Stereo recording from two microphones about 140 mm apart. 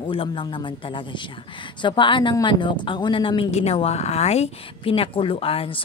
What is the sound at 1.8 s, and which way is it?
A woman's voice, 35° left (ahead or behind).